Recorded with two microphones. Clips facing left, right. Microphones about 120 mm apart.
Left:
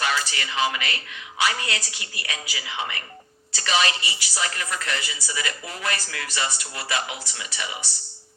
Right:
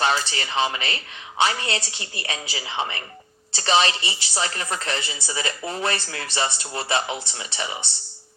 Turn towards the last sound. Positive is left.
turn(degrees=-30)  # may be behind; listen again after turning